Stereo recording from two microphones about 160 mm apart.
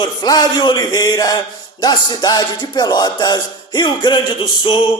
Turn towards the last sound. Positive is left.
turn(degrees=30)  # may be behind; listen again after turning